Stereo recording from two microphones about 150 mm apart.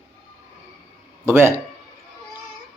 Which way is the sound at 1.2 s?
15° right (ahead or behind).